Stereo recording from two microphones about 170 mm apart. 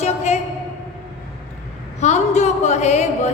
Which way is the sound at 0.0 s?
40° left (ahead or behind).